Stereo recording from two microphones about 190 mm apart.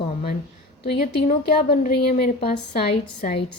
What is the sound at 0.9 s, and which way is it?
A woman's voice, 50° left (ahead or behind).